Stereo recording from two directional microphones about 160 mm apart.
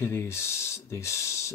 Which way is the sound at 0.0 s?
15° left (ahead or behind).